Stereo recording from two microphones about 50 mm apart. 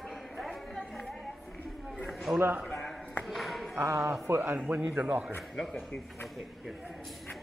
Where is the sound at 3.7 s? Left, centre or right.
Right.